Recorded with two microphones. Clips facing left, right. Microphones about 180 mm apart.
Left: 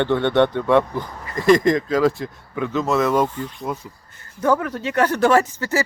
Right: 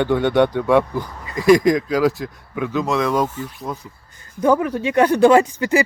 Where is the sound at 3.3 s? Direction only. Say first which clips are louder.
Left 1 dB; 10° right (ahead or behind).